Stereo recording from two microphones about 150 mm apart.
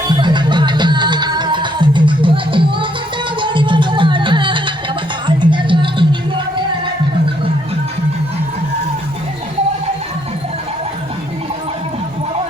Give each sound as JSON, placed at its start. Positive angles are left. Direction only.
{"t": 0.1, "sound": "music", "side_deg": -30}